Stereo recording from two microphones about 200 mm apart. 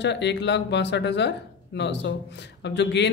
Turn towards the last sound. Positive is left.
turn(degrees=60)  # may be behind; listen again after turning